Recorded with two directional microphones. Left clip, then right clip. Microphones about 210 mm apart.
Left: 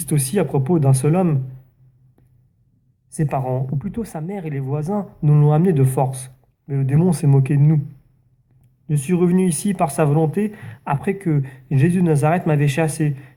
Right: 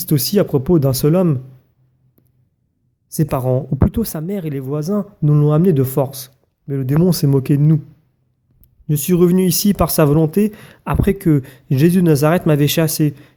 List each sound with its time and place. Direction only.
0.0 s speech: 45° right (ahead or behind)
3.1 s speech: 50° right (ahead or behind)
8.9 s speech: 50° right (ahead or behind)